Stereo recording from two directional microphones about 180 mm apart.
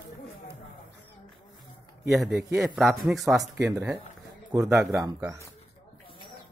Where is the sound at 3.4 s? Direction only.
15° right (ahead or behind).